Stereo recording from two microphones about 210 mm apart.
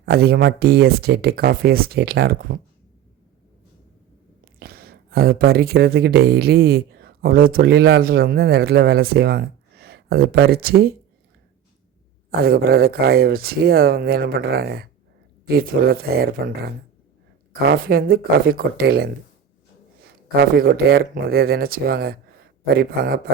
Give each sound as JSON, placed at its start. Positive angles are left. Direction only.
{"t": 0.0, "sound": "speech", "side_deg": -50}
{"t": 4.4, "sound": "speech", "side_deg": -45}
{"t": 12.4, "sound": "speech", "side_deg": -45}
{"t": 17.6, "sound": "speech", "side_deg": -45}
{"t": 20.4, "sound": "speech", "side_deg": -45}